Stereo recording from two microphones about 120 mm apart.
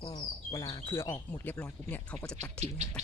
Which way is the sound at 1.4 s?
15° left (ahead or behind).